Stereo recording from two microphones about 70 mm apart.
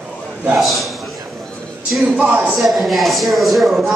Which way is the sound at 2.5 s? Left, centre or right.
Centre.